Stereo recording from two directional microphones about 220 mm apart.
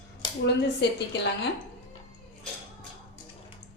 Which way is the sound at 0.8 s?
50° left (ahead or behind).